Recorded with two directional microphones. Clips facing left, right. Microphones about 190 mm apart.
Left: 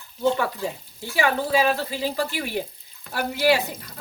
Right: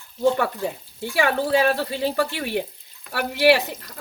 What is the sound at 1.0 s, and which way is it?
Speech, 60° right (ahead or behind).